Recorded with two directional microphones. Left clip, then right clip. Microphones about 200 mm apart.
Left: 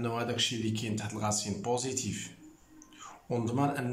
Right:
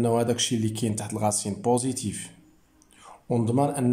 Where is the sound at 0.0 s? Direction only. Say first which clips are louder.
Right 8 dB; 30° right (ahead or behind).